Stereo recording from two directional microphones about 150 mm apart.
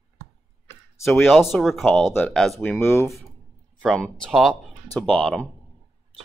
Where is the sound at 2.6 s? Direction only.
15° left (ahead or behind).